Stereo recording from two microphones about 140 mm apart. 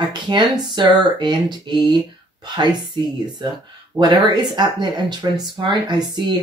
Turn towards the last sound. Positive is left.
turn(degrees=-30)  # may be behind; listen again after turning